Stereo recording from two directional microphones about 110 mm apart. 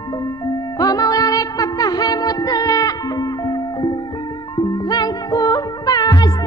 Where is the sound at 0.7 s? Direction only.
35° left (ahead or behind).